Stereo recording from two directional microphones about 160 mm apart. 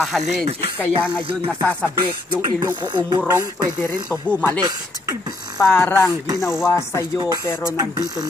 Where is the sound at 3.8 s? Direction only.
10° left (ahead or behind).